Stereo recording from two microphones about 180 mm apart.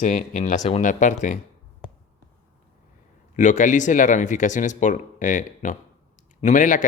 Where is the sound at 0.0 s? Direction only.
45° left (ahead or behind).